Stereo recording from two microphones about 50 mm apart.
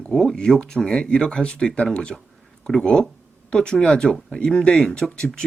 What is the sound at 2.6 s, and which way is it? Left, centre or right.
Speech, centre.